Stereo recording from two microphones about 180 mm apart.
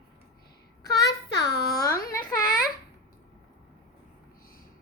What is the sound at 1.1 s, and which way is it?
Child singing, 75° left (ahead or behind).